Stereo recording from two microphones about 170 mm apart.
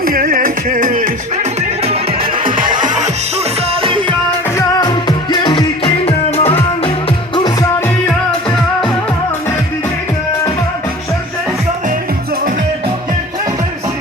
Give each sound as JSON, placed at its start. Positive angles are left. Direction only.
{"t": 0.0, "sound": "music", "side_deg": -60}
{"t": 4.5, "sound": "music", "side_deg": 25}